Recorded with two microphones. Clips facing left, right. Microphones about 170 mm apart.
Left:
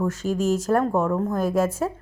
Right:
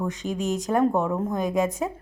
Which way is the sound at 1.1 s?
15° right (ahead or behind).